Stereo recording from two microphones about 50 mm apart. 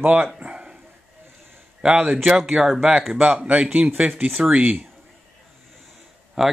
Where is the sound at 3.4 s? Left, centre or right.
Right.